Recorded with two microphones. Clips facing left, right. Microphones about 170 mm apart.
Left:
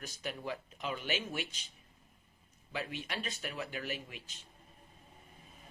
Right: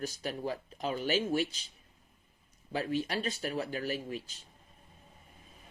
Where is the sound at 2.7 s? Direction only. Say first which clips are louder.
Right 8 dB; 35° right (ahead or behind).